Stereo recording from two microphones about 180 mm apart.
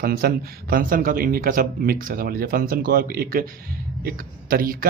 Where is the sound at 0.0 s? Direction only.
55° right (ahead or behind).